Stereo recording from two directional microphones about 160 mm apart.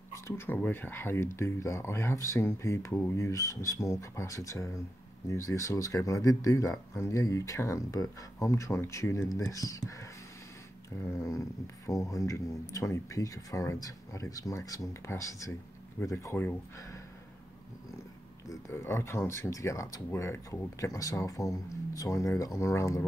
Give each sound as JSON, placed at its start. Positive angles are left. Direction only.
{"t": 0.1, "sound": "speech", "side_deg": 15}
{"t": 18.5, "sound": "speech", "side_deg": 15}